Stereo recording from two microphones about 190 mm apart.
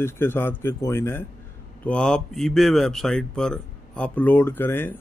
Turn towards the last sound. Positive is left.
turn(degrees=10)  # may be behind; listen again after turning